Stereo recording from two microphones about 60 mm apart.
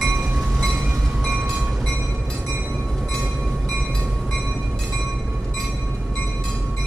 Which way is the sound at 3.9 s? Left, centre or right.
Centre.